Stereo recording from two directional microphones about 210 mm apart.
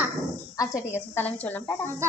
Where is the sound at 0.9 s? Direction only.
10° left (ahead or behind).